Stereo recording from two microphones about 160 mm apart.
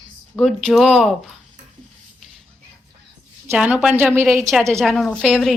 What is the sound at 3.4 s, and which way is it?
Speech, 10° right (ahead or behind).